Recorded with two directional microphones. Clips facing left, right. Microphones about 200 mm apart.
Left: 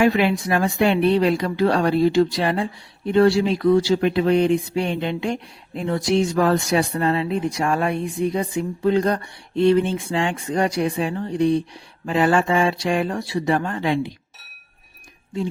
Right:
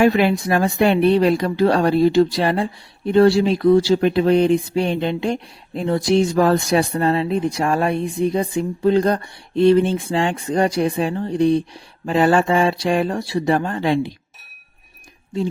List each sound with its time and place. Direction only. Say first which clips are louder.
0.0 s speech: right 2 dB; 40° right (ahead or behind)